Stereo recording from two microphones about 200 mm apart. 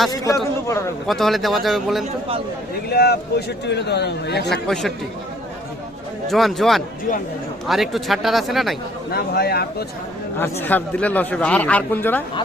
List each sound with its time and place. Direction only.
1.0 s speech: centre (ahead or behind)
2.9 s a man's voice: 55° left (ahead or behind)
4.7 s speech: centre (ahead or behind)
6.2 s speech: centre (ahead or behind)
9.1 s a man's voice: 50° left (ahead or behind)
10.3 s a man's voice: 10° left (ahead or behind)